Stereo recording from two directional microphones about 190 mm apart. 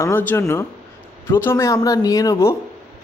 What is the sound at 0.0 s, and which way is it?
Speech, 10° left (ahead or behind).